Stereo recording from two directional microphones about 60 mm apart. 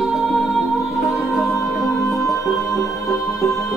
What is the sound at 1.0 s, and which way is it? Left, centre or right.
Music, centre.